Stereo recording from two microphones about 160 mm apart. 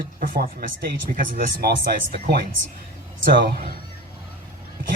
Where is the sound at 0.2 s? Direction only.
65° right (ahead or behind).